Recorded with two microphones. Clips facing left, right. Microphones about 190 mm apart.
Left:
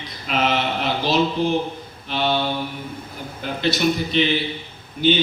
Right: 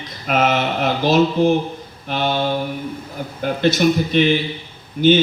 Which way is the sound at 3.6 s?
45° right (ahead or behind).